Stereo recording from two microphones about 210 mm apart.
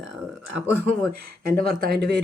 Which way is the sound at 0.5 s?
5° left (ahead or behind).